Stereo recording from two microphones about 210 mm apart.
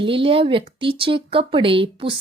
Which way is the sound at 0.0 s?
25° right (ahead or behind).